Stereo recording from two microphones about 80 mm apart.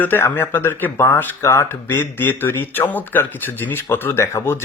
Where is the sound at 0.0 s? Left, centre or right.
Left.